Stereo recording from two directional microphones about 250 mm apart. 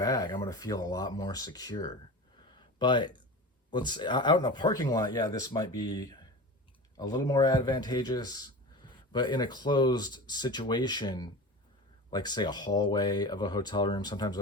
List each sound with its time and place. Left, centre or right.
0.0 s a man's voice: centre
2.6 s a sound: centre
3.7 s a man's voice: centre